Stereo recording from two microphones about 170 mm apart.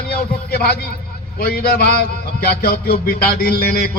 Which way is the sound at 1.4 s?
65° left (ahead or behind).